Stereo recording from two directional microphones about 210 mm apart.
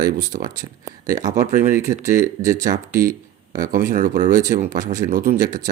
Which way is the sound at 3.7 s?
35° right (ahead or behind).